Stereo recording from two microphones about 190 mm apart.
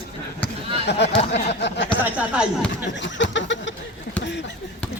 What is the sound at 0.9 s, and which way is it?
Speech, 65° left (ahead or behind).